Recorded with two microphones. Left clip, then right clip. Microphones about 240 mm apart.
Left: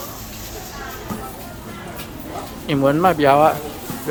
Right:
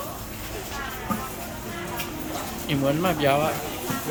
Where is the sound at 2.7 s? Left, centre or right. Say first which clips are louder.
Left 8 dB; left.